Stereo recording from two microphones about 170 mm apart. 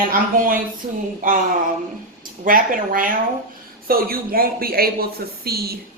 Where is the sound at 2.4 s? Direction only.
55° right (ahead or behind).